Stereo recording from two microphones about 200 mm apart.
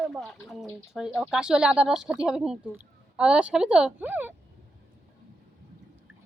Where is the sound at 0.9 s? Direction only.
5° right (ahead or behind).